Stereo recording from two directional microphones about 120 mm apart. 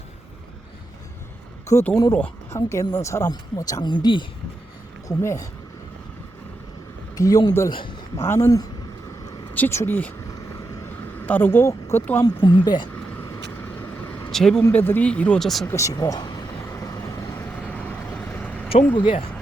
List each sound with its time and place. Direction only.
1.7 s speech: 15° left (ahead or behind)
2.6 s speech: 25° left (ahead or behind); by 4.3 s 40° left (ahead or behind)
5.0 s speech: 25° left (ahead or behind)
7.2 s speech: 30° left (ahead or behind)
7.7 s speech: 45° left (ahead or behind)
8.2 s speech: 20° left (ahead or behind)
10.8 s vehicle: 15° left (ahead or behind)
12.2 s speech: 40° left (ahead or behind)
14.3 s speech: 5° left (ahead or behind)
14.6 s speech: 15° left (ahead or behind); by 15.6 s centre (ahead or behind)
15.6 s speech: 25° left (ahead or behind)
16.6 s vehicle: 25° left (ahead or behind)
17.7 s vehicle: 10° left (ahead or behind)
18.9 s speech: 45° left (ahead or behind)